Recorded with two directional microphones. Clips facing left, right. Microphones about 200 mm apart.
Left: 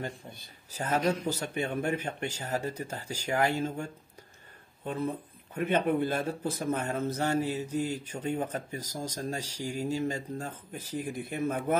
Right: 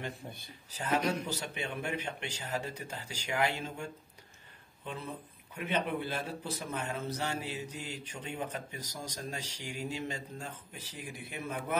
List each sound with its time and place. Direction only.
0.7 s speech: 45° left (ahead or behind)